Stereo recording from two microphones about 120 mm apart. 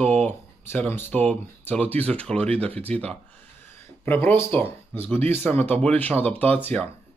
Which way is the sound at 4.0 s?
15° left (ahead or behind).